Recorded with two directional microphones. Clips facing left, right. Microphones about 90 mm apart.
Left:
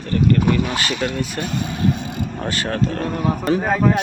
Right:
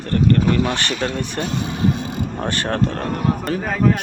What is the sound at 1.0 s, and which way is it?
Speech, 25° right (ahead or behind).